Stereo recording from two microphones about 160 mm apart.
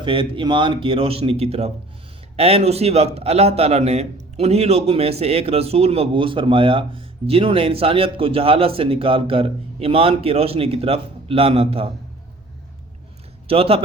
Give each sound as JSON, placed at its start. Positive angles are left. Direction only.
{"t": 0.0, "sound": "a man's voice", "side_deg": -30}
{"t": 13.5, "sound": "a man's voice", "side_deg": -35}